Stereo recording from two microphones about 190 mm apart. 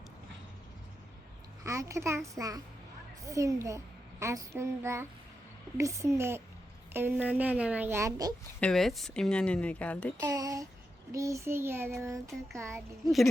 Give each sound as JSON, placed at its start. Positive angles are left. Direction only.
{"t": 1.6, "sound": "a woman's voice", "side_deg": -15}
{"t": 8.6, "sound": "speech", "side_deg": 0}
{"t": 10.2, "sound": "a woman's voice", "side_deg": -20}